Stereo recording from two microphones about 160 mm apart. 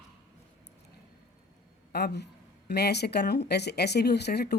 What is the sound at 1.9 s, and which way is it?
Speech, 90° left.